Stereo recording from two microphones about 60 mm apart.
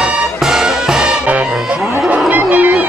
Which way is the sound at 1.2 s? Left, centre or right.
Right.